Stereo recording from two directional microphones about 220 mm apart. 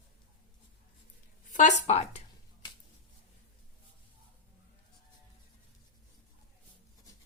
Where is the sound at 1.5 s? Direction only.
35° left (ahead or behind).